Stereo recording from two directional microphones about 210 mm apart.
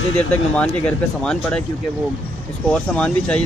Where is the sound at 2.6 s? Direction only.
5° left (ahead or behind).